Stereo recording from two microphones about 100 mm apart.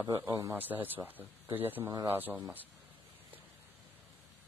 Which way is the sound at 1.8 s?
35° right (ahead or behind).